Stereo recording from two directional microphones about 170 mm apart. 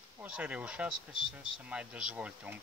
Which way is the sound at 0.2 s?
10° right (ahead or behind).